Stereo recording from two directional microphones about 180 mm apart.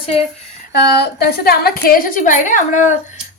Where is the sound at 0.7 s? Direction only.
65° left (ahead or behind).